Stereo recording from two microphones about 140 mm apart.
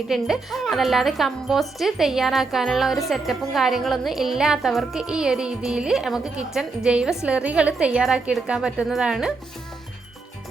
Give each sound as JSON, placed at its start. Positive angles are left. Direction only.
{"t": 0.1, "sound": "speech", "side_deg": 0}